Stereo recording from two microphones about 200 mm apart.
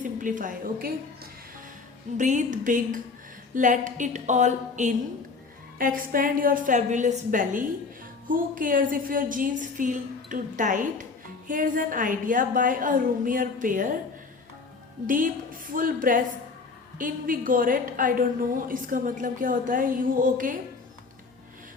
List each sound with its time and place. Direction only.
0.0 s a woman's voice: 40° right (ahead or behind)
15.0 s a woman's voice: 45° right (ahead or behind)